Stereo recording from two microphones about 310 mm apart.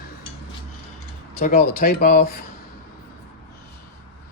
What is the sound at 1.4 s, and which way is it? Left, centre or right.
Speech, left.